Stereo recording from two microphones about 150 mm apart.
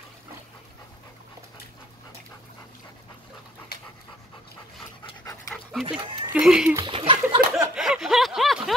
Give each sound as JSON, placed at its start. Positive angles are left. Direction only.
{"t": 5.5, "sound": "dog", "side_deg": 0}
{"t": 5.9, "sound": "speech", "side_deg": -35}
{"t": 6.2, "sound": "speech", "side_deg": -5}
{"t": 6.8, "sound": "speech", "side_deg": -35}
{"t": 7.7, "sound": "a sound", "side_deg": -5}